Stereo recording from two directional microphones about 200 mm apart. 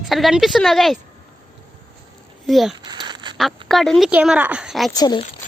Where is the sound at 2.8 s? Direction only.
20° right (ahead or behind).